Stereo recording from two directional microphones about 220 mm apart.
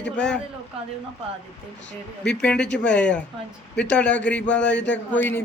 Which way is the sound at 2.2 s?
5° left (ahead or behind).